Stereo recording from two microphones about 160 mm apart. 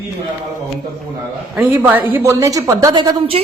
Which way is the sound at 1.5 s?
10° right (ahead or behind).